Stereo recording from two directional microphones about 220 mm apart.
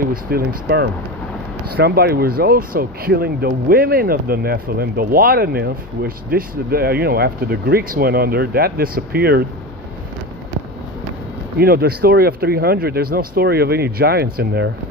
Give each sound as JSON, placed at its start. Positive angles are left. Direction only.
{"t": 0.0, "sound": "speech", "side_deg": -40}
{"t": 11.5, "sound": "speech", "side_deg": -45}